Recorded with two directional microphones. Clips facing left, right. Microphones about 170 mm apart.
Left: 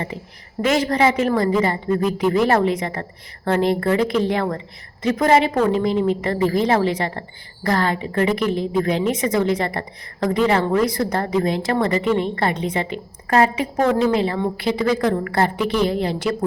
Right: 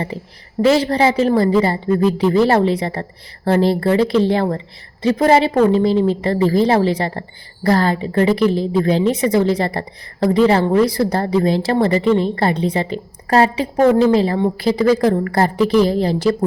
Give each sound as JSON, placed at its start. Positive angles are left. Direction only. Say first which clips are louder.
{"t": 0.1, "sound": "a woman's voice", "louder": "right 5 dB", "side_deg": -35}